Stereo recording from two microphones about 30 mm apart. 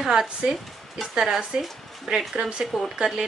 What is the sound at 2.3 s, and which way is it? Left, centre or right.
Speech, right.